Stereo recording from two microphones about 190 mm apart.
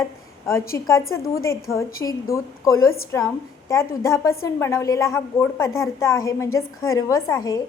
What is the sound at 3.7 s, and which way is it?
A woman's voice, 15° left (ahead or behind).